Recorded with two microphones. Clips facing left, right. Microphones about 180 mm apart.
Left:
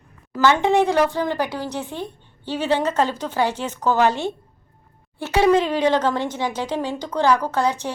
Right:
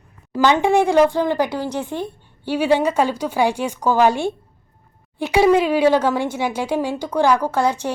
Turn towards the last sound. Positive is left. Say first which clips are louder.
# right 2 dB
turn(degrees=-10)  # may be behind; listen again after turning